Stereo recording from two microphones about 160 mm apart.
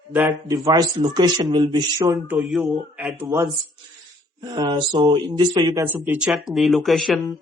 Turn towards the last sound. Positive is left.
turn(degrees=0)  # may be behind; listen again after turning